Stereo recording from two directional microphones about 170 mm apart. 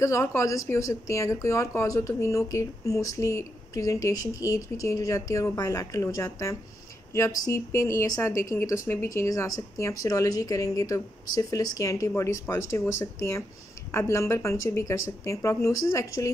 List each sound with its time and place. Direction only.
0.0 s speech: 15° left (ahead or behind)